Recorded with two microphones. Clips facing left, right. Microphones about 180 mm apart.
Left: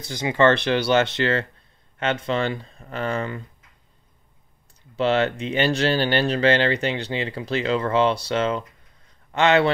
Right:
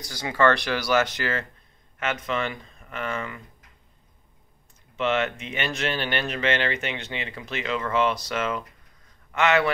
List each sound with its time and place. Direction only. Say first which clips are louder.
0.0 s speech: left 3 dB; 20° left (ahead or behind)
4.9 s speech: left 4 dB; 35° left (ahead or behind)